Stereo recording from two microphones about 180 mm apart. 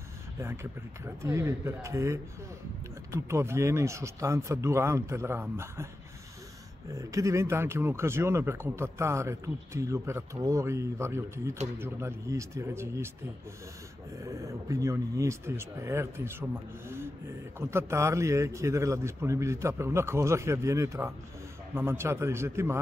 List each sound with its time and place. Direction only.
1.0 s speech: 15° right (ahead or behind)
6.9 s speech: 15° right (ahead or behind)
14.1 s speech: 20° right (ahead or behind)